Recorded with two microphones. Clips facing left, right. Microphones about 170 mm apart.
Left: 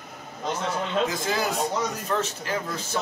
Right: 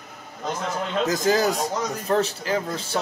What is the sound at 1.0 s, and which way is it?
Speech, 40° right (ahead or behind).